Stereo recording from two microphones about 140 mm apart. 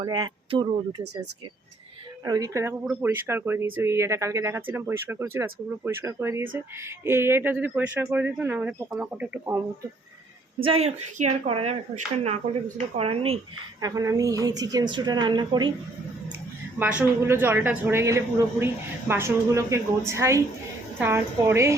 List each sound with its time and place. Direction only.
0.0 s speech: 35° right (ahead or behind)
2.2 s a woman's voice: 25° right (ahead or behind)
10.6 s speech: 45° right (ahead or behind)
13.8 s a woman's voice: 25° right (ahead or behind)
16.7 s a woman's voice: 10° right (ahead or behind)